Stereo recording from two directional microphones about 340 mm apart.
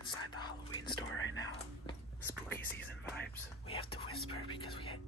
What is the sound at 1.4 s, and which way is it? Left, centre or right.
Whispering, centre.